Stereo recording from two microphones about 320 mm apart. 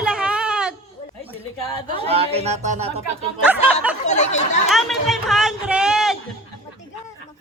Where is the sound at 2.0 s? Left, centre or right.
Centre.